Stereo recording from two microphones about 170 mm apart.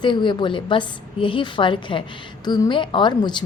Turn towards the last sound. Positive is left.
turn(degrees=25)  # may be behind; listen again after turning